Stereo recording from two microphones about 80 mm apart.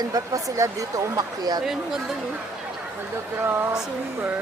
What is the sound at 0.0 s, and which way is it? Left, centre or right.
Speech, right.